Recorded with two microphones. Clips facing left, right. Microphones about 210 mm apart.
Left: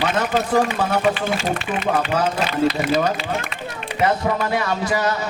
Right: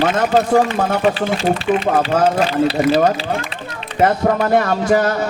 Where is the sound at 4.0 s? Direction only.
50° right (ahead or behind).